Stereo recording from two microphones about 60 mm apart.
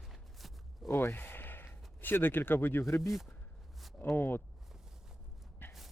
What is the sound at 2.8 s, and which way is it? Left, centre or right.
Speech, left.